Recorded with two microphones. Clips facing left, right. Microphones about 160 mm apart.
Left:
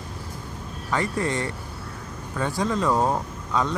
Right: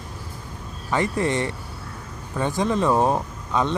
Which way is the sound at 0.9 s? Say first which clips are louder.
Right 3 dB; 20° right (ahead or behind).